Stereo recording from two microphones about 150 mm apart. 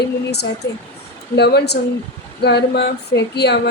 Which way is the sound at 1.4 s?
90° left.